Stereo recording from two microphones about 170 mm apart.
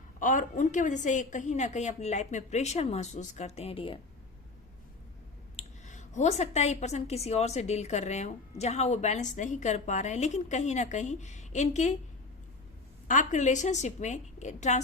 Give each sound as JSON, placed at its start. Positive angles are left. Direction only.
{"t": 0.2, "sound": "a woman's voice", "side_deg": 50}
{"t": 5.5, "sound": "a woman's voice", "side_deg": 45}
{"t": 13.1, "sound": "a woman's voice", "side_deg": 45}